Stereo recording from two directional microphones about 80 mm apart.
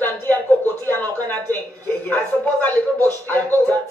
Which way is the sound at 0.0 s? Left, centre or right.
Left.